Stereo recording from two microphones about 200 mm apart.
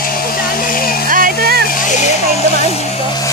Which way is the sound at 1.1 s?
45° right (ahead or behind).